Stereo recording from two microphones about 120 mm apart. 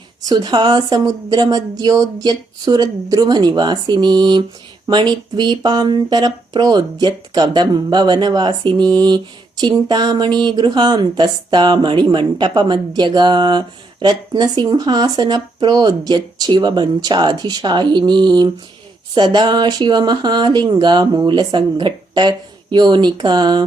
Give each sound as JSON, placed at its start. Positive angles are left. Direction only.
{"t": 0.3, "sound": "speech", "side_deg": -35}